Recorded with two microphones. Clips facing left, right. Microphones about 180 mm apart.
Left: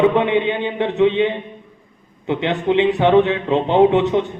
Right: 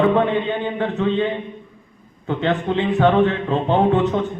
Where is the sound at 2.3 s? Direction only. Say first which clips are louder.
Left 2 dB; 15° left (ahead or behind).